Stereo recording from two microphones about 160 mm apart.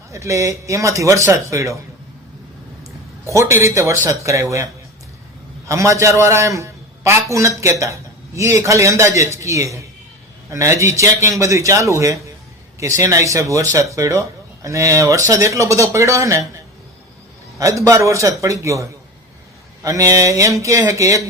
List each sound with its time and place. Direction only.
0.1 s a man's voice: 20° right (ahead or behind)
3.2 s a man's voice: 15° right (ahead or behind)
17.6 s a man's voice: 20° right (ahead or behind)